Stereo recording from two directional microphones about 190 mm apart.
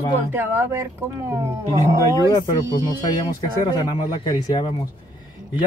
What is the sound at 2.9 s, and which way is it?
Speech, 20° left (ahead or behind).